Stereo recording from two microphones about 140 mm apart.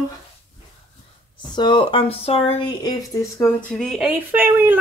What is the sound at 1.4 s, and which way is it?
Speech, 30° left (ahead or behind).